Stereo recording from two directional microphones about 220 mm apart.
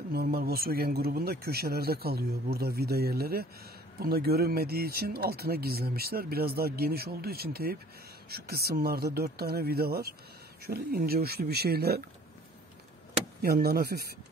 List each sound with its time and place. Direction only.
0.1 s speech: 45° right (ahead or behind)
13.4 s speech: 45° right (ahead or behind)